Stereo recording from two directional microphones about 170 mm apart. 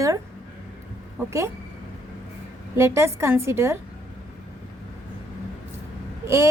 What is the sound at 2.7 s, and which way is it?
A woman's voice, 15° right (ahead or behind).